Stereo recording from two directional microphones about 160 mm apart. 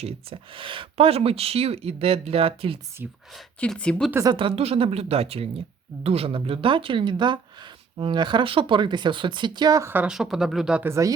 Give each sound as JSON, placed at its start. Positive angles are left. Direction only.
{"t": 0.0, "sound": "speech", "side_deg": -35}
{"t": 3.0, "sound": "speech", "side_deg": -10}
{"t": 3.3, "sound": "speech", "side_deg": 5}
{"t": 4.1, "sound": "speech", "side_deg": -20}
{"t": 4.4, "sound": "speech", "side_deg": -35}